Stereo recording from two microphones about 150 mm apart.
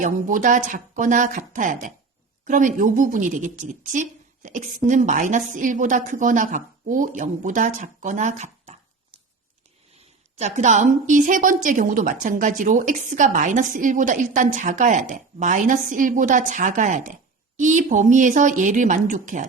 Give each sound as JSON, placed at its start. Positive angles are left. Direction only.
{"t": 0.0, "sound": "a woman's voice", "side_deg": -60}
{"t": 10.3, "sound": "a woman's voice", "side_deg": -50}